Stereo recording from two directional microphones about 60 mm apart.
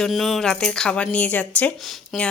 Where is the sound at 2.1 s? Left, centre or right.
Centre.